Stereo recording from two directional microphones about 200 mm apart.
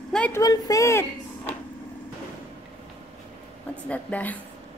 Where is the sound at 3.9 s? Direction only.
5° left (ahead or behind).